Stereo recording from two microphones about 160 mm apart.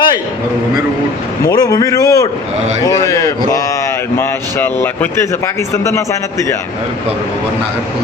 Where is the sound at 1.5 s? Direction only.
25° left (ahead or behind).